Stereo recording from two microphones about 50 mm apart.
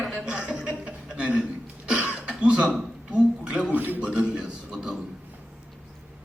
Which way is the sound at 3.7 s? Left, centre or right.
Right.